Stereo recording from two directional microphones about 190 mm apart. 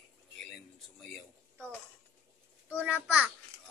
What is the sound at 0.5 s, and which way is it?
A man's voice, centre (ahead or behind).